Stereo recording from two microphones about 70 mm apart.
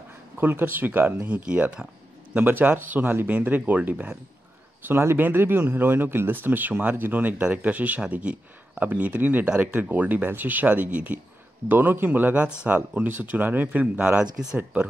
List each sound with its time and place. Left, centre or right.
0.4 s speech: right; by 1.9 s centre
2.3 s speech: right